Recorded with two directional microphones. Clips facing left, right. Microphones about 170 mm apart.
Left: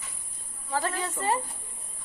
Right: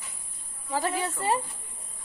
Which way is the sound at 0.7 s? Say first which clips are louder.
Right 1 dB; 15° right (ahead or behind).